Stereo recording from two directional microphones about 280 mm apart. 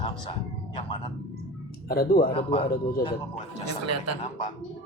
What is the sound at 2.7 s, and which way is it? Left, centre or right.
Speech, left.